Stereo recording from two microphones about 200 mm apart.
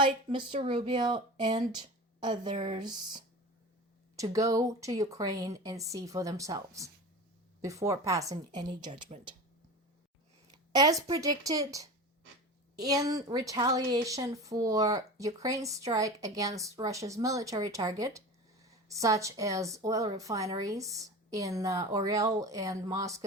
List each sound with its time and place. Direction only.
0.0 s speech: 25° right (ahead or behind)
4.2 s a woman's voice: 15° right (ahead or behind)
10.5 s a sound: 20° right (ahead or behind)
11.0 s a woman's voice: 20° right (ahead or behind)